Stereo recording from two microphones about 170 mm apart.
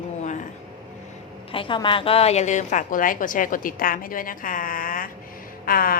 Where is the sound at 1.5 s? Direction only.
30° left (ahead or behind).